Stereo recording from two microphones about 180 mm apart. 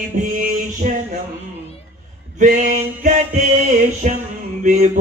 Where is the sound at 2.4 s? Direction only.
45° right (ahead or behind).